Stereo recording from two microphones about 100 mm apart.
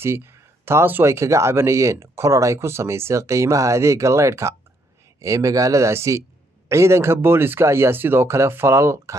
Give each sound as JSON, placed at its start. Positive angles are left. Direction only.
{"t": 0.0, "sound": "speech", "side_deg": -25}